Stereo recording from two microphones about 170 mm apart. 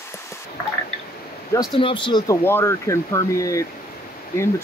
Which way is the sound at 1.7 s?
30° left (ahead or behind).